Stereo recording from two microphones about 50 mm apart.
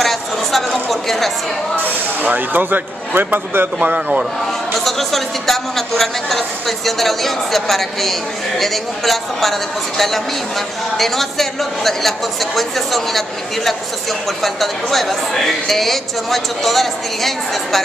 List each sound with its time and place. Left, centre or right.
0.0 s a sound: centre
2.2 s a man's voice: right
3.8 s speech: right
4.7 s a man's voice: centre
14.4 s a man's voice: centre